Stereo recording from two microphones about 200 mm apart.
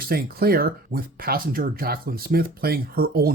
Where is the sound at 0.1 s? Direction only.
50° right (ahead or behind).